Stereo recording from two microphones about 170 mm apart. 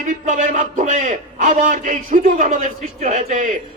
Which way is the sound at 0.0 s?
45° right (ahead or behind).